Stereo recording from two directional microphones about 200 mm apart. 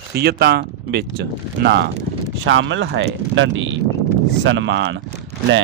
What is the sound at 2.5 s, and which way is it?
Speech, 70° right (ahead or behind).